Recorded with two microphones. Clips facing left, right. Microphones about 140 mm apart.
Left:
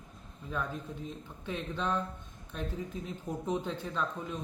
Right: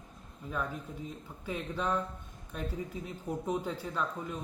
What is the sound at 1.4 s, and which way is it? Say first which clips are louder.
Speech: even; 10° right (ahead or behind).